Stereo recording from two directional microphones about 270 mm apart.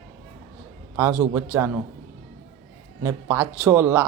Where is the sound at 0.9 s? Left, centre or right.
Centre.